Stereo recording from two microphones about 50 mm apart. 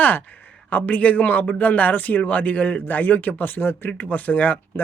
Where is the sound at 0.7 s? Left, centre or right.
Left.